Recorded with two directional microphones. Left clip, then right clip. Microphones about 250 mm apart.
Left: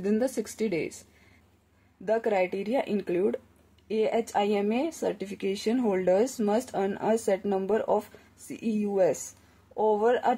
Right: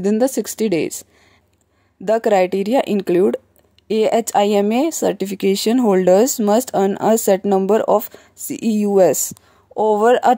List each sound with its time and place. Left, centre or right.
0.0 s speech: right
2.0 s speech: right